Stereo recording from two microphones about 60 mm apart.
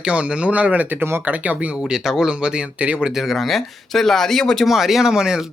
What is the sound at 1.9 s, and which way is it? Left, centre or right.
Speech, centre.